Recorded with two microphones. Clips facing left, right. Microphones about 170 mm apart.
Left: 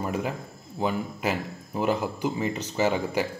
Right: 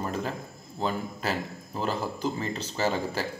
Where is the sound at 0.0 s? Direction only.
15° left (ahead or behind).